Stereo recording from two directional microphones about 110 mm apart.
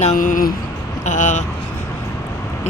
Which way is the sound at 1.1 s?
90° left.